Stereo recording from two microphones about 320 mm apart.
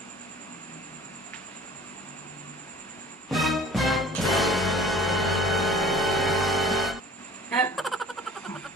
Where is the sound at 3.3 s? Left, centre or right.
Centre.